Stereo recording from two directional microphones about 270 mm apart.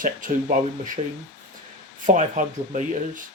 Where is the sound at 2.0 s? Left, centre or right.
Right.